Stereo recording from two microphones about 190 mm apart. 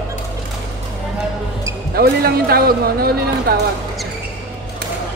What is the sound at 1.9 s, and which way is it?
Speech, 55° right (ahead or behind).